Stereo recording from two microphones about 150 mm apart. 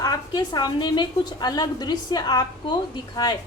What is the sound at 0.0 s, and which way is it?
A woman's voice, 25° left (ahead or behind).